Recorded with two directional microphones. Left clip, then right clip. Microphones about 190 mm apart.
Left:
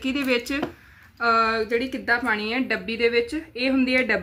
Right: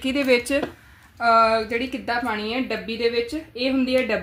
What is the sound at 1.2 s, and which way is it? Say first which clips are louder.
Speech: right 3 dB; 45° right (ahead or behind).